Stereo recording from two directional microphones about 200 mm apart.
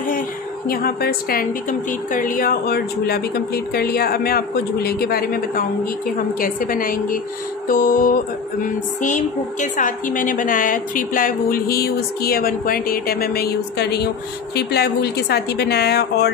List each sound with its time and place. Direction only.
0.7 s a woman's voice: 50° left (ahead or behind)